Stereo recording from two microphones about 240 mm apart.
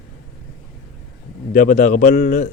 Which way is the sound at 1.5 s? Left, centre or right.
Left.